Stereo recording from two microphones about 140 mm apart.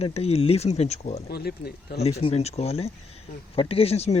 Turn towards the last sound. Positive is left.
turn(degrees=50)  # may be behind; listen again after turning